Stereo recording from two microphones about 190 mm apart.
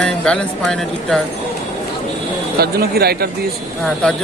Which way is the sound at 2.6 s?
55° right (ahead or behind).